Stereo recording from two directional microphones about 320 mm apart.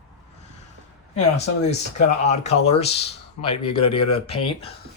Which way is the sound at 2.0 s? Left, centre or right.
Left.